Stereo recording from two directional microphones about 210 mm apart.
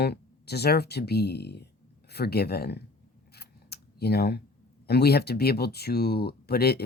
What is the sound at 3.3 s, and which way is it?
Scissors, 50° left (ahead or behind).